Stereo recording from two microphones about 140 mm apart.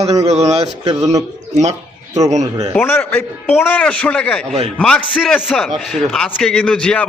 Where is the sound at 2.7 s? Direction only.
15° left (ahead or behind).